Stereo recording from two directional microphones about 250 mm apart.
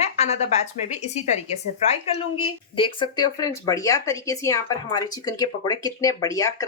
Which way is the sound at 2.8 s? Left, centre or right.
Centre.